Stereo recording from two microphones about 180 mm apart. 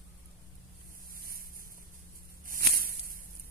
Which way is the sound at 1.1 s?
55° right (ahead or behind).